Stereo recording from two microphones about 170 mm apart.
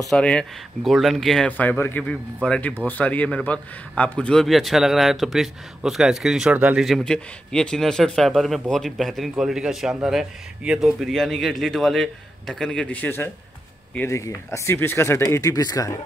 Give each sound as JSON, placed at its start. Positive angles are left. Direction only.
{"t": 0.1, "sound": "speech", "side_deg": 5}